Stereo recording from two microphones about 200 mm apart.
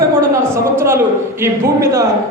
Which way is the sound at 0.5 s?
15° right (ahead or behind).